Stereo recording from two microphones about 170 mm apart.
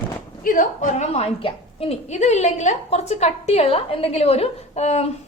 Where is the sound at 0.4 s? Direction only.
50° left (ahead or behind).